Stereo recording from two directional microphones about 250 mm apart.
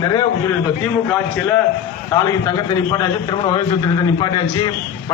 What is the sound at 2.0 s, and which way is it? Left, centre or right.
A man's voice, centre.